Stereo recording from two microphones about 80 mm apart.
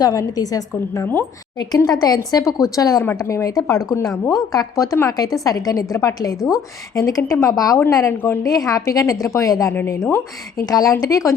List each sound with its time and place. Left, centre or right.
0.0 s a woman's voice: left
7.2 s speech: left
7.5 s a woman's voice: left
7.9 s a woman's voice: left
9.7 s speech: left
10.7 s a woman's voice: left